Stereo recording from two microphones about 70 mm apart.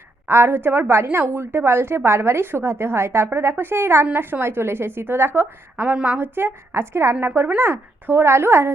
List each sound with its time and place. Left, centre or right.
0.3 s a woman's voice: right
5.8 s a woman's voice: right